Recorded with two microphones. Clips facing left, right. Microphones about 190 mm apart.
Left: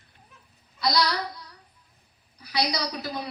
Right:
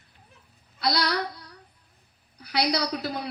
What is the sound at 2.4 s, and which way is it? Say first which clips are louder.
Speech: right 2 dB; 60° right (ahead or behind).